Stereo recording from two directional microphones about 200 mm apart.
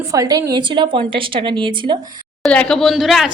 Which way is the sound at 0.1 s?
15° right (ahead or behind).